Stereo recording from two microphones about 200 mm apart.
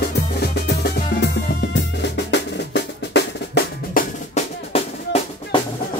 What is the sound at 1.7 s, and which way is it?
Drum, 60° left (ahead or behind).